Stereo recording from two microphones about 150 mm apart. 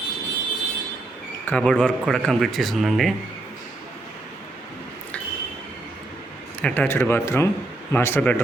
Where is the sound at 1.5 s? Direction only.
5° left (ahead or behind).